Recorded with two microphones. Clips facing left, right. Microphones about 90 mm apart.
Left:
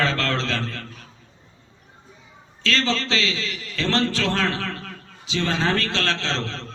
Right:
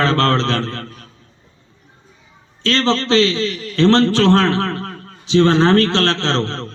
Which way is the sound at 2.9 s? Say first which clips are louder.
Right 9 dB; 35° right (ahead or behind).